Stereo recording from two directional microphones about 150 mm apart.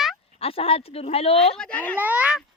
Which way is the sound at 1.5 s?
5° left (ahead or behind).